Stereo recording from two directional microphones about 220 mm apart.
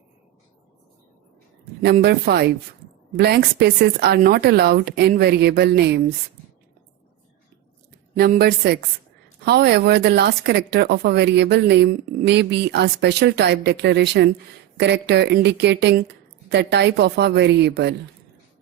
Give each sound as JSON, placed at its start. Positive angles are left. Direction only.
{"t": 1.8, "sound": "speech", "side_deg": -45}
{"t": 8.1, "sound": "speech", "side_deg": -45}